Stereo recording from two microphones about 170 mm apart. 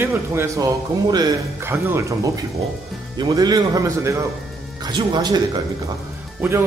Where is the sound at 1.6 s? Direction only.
15° right (ahead or behind).